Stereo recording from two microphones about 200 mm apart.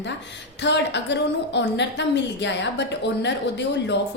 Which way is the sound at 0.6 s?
60° left (ahead or behind).